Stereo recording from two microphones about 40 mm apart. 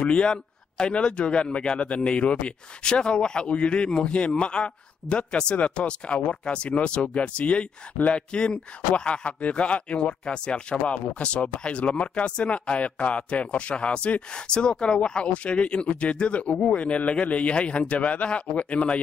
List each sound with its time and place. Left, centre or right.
0.1 s speech: left